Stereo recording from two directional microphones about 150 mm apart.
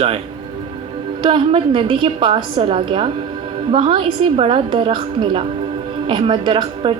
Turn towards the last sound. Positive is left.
turn(degrees=-35)  # may be behind; listen again after turning